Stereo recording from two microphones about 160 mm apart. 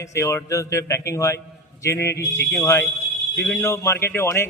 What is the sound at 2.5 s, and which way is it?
Speech, 15° left (ahead or behind).